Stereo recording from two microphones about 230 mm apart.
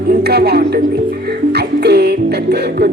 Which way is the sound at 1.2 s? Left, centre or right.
Right.